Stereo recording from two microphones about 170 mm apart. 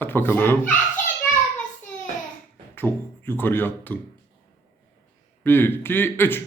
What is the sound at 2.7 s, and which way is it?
Speech, 10° left (ahead or behind).